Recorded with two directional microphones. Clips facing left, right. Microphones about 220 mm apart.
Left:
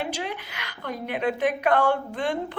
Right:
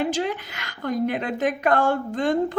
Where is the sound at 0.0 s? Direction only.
45° right (ahead or behind).